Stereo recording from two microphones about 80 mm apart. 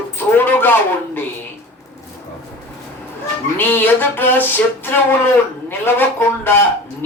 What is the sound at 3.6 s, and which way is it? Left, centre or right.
Speech, left.